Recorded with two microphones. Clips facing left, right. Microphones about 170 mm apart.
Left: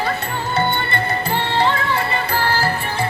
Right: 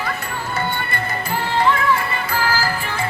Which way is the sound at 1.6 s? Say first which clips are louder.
Right 3 dB; 30° left (ahead or behind).